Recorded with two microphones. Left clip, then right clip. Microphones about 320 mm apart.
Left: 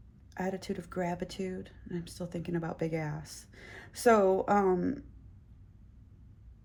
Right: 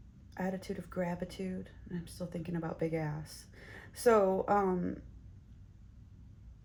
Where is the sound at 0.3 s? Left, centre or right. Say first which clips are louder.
Left 3 dB; left.